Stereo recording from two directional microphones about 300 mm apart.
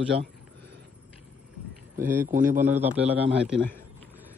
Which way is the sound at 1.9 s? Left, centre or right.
Centre.